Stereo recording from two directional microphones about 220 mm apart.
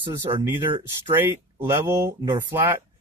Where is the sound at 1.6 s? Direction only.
10° right (ahead or behind).